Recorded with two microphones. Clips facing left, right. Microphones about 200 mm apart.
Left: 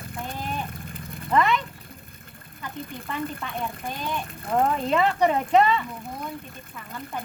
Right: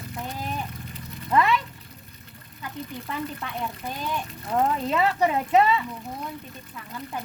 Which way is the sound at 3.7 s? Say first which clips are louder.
Even; 50° left (ahead or behind).